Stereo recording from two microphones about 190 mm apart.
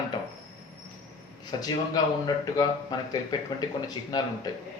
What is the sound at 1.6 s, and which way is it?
A man's voice, 20° left (ahead or behind).